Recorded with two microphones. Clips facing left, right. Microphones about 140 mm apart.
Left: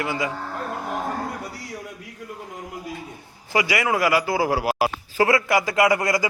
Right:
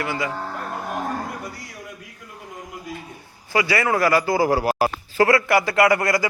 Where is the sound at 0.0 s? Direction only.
20° left (ahead or behind).